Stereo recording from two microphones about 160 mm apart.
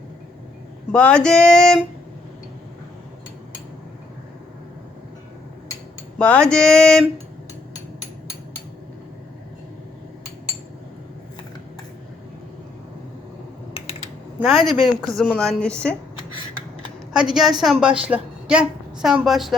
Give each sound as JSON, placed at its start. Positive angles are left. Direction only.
{"t": 0.9, "sound": "a woman's voice", "side_deg": 5}
{"t": 6.1, "sound": "a woman's voice", "side_deg": 5}
{"t": 13.7, "sound": "typing", "side_deg": 40}
{"t": 14.3, "sound": "a woman's voice", "side_deg": 0}
{"t": 17.1, "sound": "a woman's voice", "side_deg": -5}